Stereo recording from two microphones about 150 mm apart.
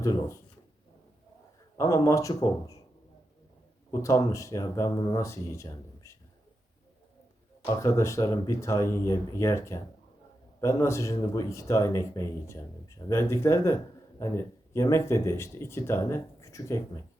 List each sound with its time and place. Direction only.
0.0 s speech: 20° left (ahead or behind)
1.8 s speech: 20° left (ahead or behind)
4.0 s speech: 20° left (ahead or behind)
7.8 s speech: 20° left (ahead or behind)